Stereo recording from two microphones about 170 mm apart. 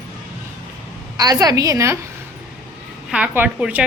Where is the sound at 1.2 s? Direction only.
20° right (ahead or behind).